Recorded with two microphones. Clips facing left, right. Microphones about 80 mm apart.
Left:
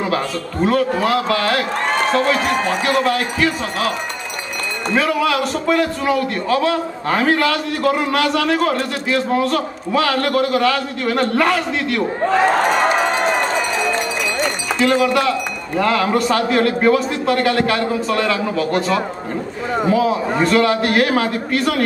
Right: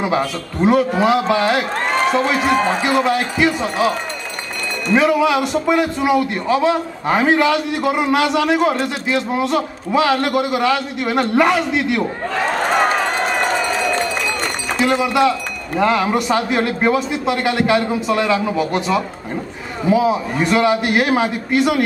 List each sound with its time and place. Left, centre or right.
0.0 s a man's voice: centre
4.9 s a man's voice: centre
14.8 s a man's voice: centre